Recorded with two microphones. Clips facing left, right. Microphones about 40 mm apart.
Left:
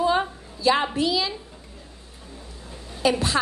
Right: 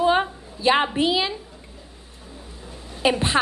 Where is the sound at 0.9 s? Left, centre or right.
Right.